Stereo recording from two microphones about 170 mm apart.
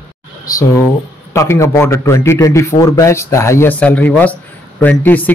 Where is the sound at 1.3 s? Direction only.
15° left (ahead or behind).